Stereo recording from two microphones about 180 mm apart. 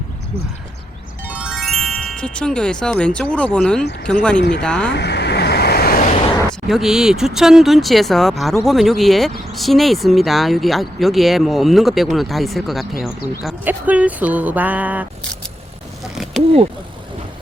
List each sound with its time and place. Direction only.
1.3 s speech: 5° right (ahead or behind)
4.4 s speech: 70° left (ahead or behind)
4.6 s speech: 5° left (ahead or behind)
4.9 s vehicle: 70° left (ahead or behind); by 6.1 s 50° left (ahead or behind)
6.7 s speech: centre (ahead or behind)
16.1 s a sound: centre (ahead or behind)